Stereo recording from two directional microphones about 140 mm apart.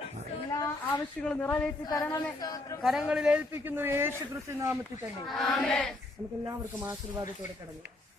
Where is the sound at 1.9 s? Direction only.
25° left (ahead or behind).